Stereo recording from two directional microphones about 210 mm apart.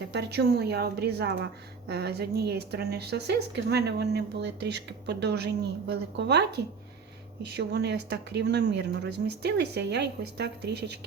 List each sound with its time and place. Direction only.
0.1 s a woman's voice: 50° right (ahead or behind)
7.4 s a woman's voice: 55° right (ahead or behind)